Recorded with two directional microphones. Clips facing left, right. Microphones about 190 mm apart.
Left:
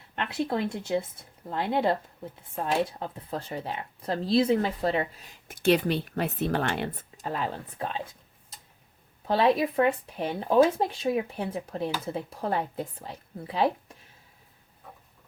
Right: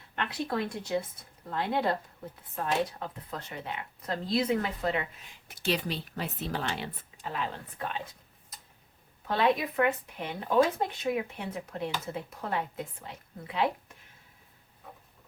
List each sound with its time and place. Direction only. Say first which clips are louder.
0.3 s speech: left 5 dB; 25° left (ahead or behind)
3.0 s speech: left 5 dB; 30° left (ahead or behind); by 7.3 s 45° left (ahead or behind)
7.8 s speech: left 3 dB; 30° left (ahead or behind)
8.5 s tick-tock: left 1 dB; 25° left (ahead or behind)
9.2 s speech: left 4 dB; 30° left (ahead or behind)